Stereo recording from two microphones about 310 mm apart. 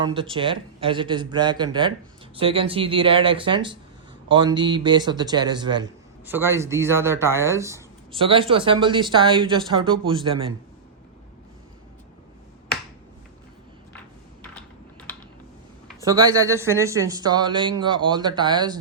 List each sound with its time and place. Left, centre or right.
0.0 s a man's voice: centre
15.1 s typing: centre
16.0 s a man's voice: centre